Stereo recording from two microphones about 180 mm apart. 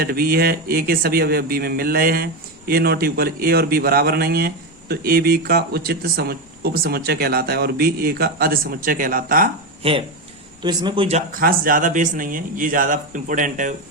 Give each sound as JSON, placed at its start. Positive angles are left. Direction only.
{"t": 0.0, "sound": "a man's voice", "side_deg": -55}
{"t": 10.6, "sound": "speech", "side_deg": -25}
{"t": 11.3, "sound": "a man's voice", "side_deg": -55}